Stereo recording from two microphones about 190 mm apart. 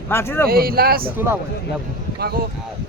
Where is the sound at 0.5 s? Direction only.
50° right (ahead or behind).